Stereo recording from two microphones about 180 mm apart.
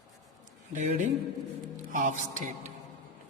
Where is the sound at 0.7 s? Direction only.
40° right (ahead or behind).